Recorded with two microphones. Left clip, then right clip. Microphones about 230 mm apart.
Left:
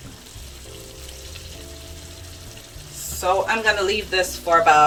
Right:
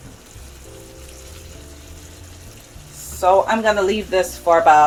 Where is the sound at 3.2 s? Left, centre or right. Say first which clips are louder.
Right 5 dB; right.